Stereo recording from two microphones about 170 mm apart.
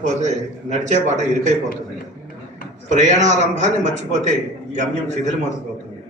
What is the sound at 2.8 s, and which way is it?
A man's voice, 45° right (ahead or behind).